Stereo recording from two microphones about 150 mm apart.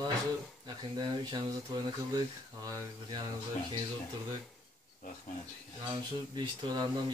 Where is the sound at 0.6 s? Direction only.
30° right (ahead or behind).